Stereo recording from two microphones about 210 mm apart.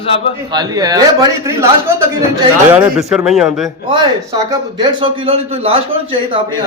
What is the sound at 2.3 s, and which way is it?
A man's voice, 10° right (ahead or behind).